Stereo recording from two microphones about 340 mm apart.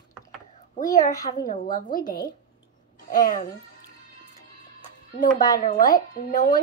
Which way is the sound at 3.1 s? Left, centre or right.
Left.